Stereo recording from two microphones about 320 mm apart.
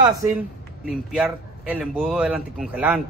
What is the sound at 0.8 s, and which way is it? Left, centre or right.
A man's voice, centre.